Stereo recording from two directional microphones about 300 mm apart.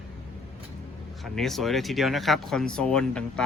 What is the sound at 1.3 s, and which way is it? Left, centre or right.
Speech, centre.